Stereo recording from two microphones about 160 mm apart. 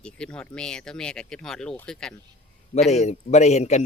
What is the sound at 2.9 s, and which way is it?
Speech, 45° left (ahead or behind).